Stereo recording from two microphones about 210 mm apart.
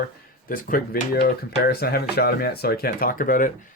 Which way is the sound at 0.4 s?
40° left (ahead or behind).